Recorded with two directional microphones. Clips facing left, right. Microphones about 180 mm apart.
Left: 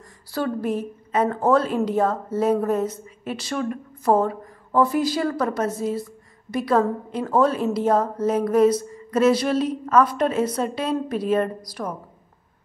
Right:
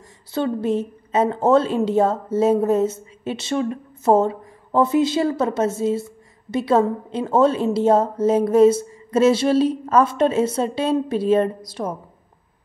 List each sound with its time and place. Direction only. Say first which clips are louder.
0.3 s speech: right 3 dB; 25° right (ahead or behind)